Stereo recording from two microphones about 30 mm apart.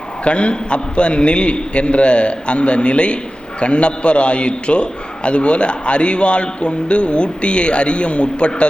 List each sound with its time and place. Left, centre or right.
0.3 s a man's voice: left